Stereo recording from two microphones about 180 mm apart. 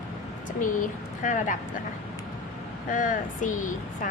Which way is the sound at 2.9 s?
45° left (ahead or behind).